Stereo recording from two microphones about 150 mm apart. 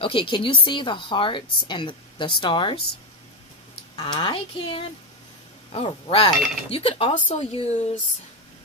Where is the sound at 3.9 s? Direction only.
30° left (ahead or behind).